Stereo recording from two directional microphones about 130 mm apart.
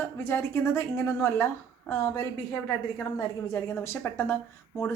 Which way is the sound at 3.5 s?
20° left (ahead or behind).